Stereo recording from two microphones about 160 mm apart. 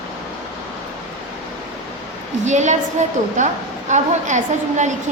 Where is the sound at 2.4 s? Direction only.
50° right (ahead or behind).